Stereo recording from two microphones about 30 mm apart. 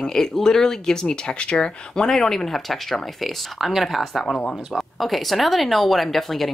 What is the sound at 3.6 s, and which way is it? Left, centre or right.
Speech, centre.